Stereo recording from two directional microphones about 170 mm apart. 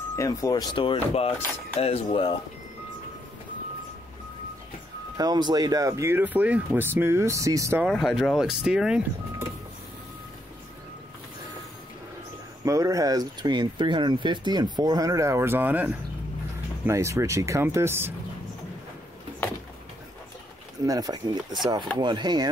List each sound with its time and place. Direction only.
0.1 s speech: 20° left (ahead or behind); by 2.3 s 35° left (ahead or behind)
5.1 s speech: 25° right (ahead or behind)
7.8 s speech: centre (ahead or behind)
12.6 s speech: 20° right (ahead or behind)
20.8 s speech: 20° right (ahead or behind)